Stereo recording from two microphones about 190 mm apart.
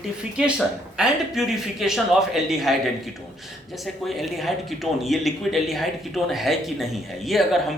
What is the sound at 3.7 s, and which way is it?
Speech, centre (ahead or behind).